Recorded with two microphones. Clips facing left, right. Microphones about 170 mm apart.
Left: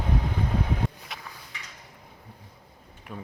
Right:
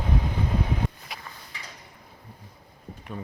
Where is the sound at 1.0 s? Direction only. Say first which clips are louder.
Even; centre (ahead or behind).